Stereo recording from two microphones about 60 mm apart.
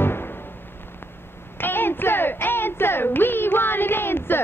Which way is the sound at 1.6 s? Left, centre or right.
Left.